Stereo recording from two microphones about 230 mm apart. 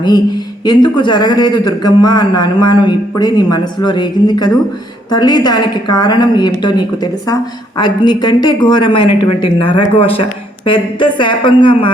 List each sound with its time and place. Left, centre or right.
0.6 s a man's voice: centre